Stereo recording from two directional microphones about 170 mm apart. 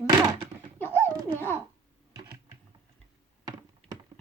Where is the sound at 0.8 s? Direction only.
10° left (ahead or behind).